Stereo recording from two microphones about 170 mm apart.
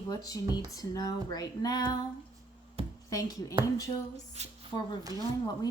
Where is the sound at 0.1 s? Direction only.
20° left (ahead or behind).